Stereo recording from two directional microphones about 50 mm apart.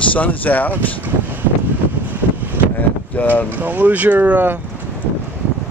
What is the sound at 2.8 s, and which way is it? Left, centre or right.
Vehicle, left.